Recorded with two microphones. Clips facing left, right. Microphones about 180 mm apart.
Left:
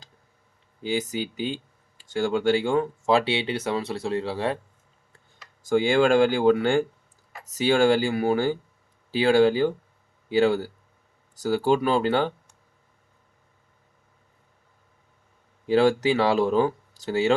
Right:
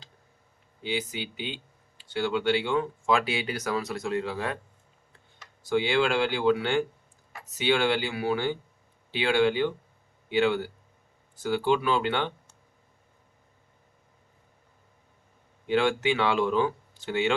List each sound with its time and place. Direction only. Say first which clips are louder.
0.8 s speech: left 5 dB; 45° left (ahead or behind)
5.6 s speech: left 5 dB; 45° left (ahead or behind)
15.6 s speech: left 5 dB; 40° left (ahead or behind)